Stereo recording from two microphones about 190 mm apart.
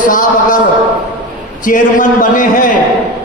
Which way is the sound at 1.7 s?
45° left (ahead or behind).